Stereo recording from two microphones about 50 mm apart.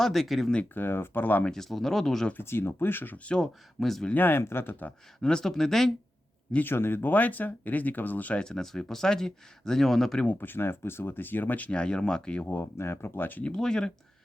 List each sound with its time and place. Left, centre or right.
0.0 s speech: centre
0.7 s speech: left
1.5 s speech: centre
2.4 s speech: left
3.4 s speech: centre
4.1 s speech: left
5.2 s speech: centre
6.6 s speech: left
7.1 s speech: left
8.4 s speech: centre
10.2 s speech: left
11.7 s speech: centre
12.5 s speech: left
13.6 s speech: centre